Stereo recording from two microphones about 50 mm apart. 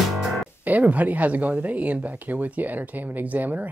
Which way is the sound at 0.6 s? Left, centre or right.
Right.